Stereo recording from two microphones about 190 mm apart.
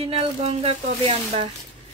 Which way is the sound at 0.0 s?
30° right (ahead or behind).